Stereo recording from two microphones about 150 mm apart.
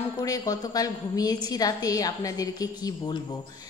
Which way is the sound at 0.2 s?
25° left (ahead or behind).